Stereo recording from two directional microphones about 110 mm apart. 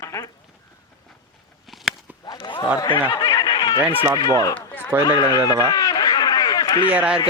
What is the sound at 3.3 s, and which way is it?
Snicker, 40° left (ahead or behind).